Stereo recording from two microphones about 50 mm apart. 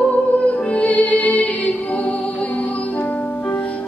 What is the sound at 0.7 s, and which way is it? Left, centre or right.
Music, left.